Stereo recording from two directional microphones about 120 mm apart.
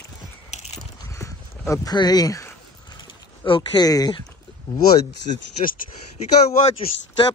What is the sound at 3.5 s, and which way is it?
Speech, 35° left (ahead or behind).